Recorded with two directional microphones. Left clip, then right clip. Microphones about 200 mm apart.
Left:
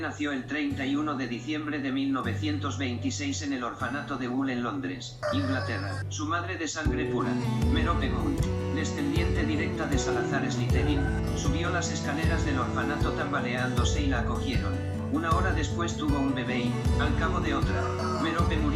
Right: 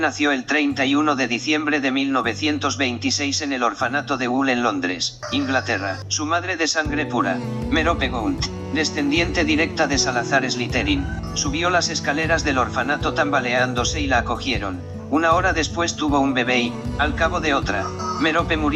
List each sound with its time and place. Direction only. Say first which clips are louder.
0.0 s speech: right 12 dB; 45° right (ahead or behind)
6.3 s speech: right 11 dB; 45° right (ahead or behind)